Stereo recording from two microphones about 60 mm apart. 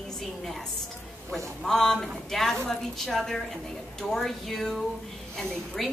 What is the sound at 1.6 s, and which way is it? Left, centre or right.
A woman's voice, centre.